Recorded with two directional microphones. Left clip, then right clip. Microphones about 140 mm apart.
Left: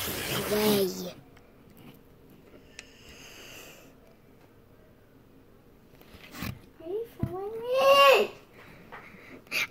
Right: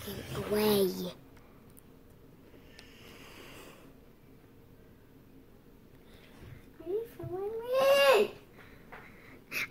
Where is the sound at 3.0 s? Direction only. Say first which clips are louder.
Left 3 dB; 40° right (ahead or behind).